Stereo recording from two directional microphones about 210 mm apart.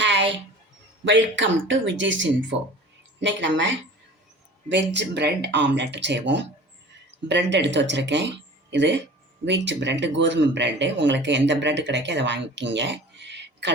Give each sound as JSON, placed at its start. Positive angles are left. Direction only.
{"t": 0.0, "sound": "a sound", "side_deg": -55}
{"t": 1.0, "sound": "speech", "side_deg": -60}
{"t": 4.9, "sound": "speech", "side_deg": -55}